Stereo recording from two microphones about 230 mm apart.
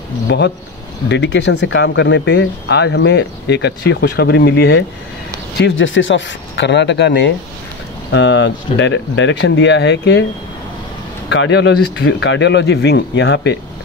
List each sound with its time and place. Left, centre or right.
0.3 s speech: left
11.2 s speech: left